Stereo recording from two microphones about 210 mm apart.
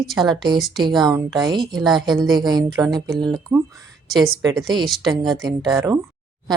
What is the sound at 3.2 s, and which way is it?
Speech, 20° right (ahead or behind).